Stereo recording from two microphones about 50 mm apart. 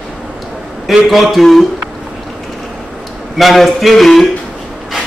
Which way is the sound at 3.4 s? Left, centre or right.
Centre.